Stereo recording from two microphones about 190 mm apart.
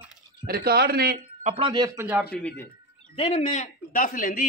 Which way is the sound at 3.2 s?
35° left (ahead or behind).